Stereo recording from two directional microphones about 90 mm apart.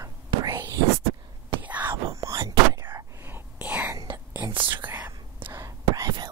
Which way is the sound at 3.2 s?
25° right (ahead or behind).